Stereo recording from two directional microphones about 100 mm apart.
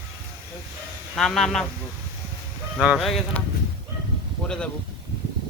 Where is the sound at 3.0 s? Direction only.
Centre (ahead or behind).